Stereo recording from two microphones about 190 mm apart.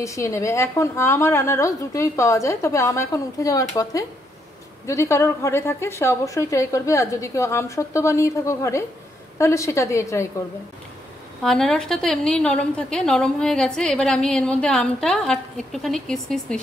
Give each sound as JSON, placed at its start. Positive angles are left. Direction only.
{"t": 0.0, "sound": "a woman's voice", "side_deg": 15}
{"t": 11.4, "sound": "a woman's voice", "side_deg": 0}